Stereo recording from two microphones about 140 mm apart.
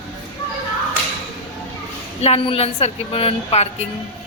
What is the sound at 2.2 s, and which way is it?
A woman's voice, 45° left (ahead or behind).